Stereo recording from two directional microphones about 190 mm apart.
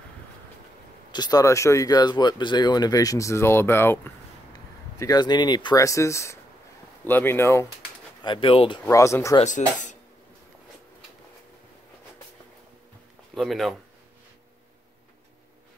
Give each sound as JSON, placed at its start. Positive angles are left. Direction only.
{"t": 1.1, "sound": "speech", "side_deg": 20}
{"t": 8.2, "sound": "speech", "side_deg": 25}
{"t": 8.8, "sound": "speech", "side_deg": 15}
{"t": 9.4, "sound": "speech", "side_deg": 40}
{"t": 13.3, "sound": "speech", "side_deg": 0}